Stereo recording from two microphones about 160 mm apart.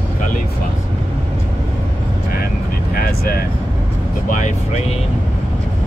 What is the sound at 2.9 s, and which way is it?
Vehicle, 70° left (ahead or behind).